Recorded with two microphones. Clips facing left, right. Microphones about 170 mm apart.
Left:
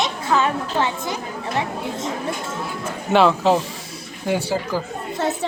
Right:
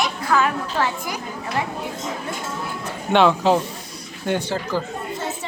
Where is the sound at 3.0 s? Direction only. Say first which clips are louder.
Even; centre (ahead or behind).